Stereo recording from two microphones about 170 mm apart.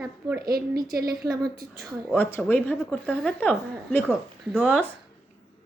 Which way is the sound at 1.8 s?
10° left (ahead or behind).